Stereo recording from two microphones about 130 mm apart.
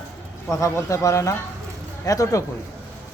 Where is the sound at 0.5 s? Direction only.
25° left (ahead or behind).